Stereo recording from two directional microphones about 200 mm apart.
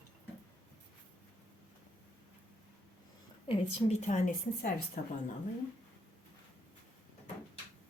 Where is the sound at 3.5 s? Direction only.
35° left (ahead or behind).